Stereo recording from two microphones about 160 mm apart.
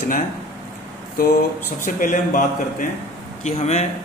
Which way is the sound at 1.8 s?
55° left (ahead or behind).